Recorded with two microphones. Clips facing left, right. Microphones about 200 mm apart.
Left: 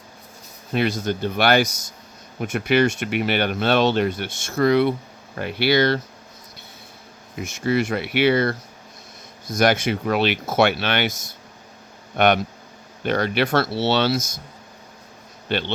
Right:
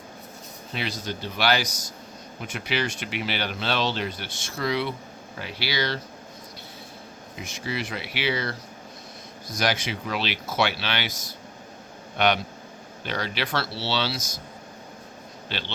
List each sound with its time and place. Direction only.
0.7 s speech: 50° left (ahead or behind)
1.6 s speech: 25° left (ahead or behind)
2.4 s speech: 55° left (ahead or behind)
7.3 s speech: 50° left (ahead or behind)
9.6 s speech: 55° left (ahead or behind)
12.1 s speech: 50° left (ahead or behind)
15.4 s a man's voice: 55° left (ahead or behind)